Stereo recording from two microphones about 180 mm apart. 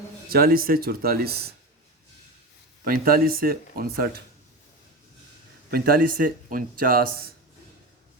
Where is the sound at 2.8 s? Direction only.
55° right (ahead or behind).